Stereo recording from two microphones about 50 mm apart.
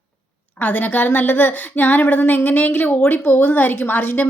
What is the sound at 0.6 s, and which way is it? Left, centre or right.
Speech, left.